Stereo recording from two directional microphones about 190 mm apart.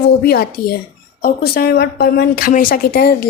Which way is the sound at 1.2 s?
50° left (ahead or behind).